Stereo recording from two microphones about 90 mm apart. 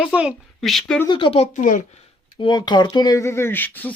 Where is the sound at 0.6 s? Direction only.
Centre (ahead or behind).